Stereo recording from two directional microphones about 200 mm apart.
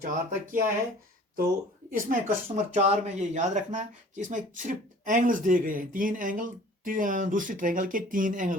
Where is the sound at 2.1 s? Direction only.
40° right (ahead or behind).